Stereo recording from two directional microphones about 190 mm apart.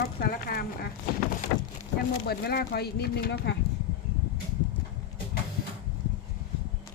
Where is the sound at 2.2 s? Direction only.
55° left (ahead or behind).